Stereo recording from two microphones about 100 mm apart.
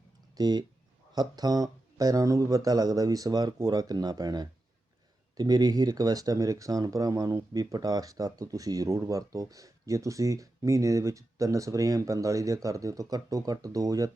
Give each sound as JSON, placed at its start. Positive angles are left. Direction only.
{"t": 0.3, "sound": "speech", "side_deg": -40}